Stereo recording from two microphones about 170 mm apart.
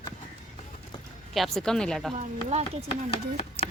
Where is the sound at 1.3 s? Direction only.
Centre (ahead or behind).